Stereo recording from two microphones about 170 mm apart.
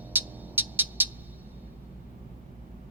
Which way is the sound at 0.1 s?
10° right (ahead or behind).